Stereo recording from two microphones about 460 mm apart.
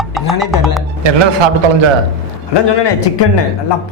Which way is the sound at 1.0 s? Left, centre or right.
Right.